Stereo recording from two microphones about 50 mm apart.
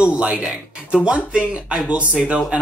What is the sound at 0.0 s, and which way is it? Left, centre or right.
Speech, right.